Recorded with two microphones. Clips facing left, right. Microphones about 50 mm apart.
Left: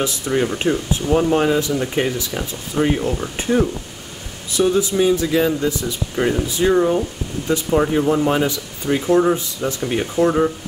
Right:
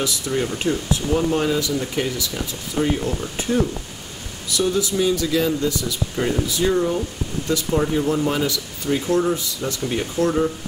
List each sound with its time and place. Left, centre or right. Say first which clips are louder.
0.0 s speech: left 3 dB; left